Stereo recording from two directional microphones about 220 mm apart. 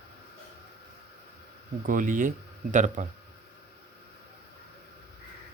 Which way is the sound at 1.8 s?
35° right (ahead or behind).